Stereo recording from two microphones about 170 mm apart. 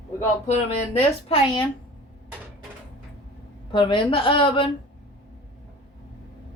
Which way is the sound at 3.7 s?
30° left (ahead or behind).